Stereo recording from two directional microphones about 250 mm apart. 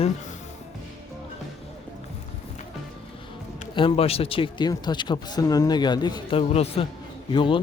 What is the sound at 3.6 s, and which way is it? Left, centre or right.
Speech, centre.